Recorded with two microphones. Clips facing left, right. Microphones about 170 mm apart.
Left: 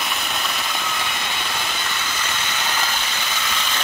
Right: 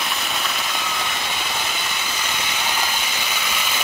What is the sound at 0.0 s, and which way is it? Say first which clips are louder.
Vehicle: even; centre (ahead or behind).